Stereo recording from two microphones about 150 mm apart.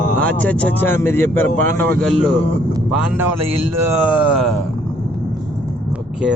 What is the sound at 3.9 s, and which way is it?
Speech, 10° right (ahead or behind).